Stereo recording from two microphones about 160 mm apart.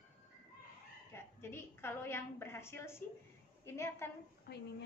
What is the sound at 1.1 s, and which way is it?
A woman's voice, 15° left (ahead or behind).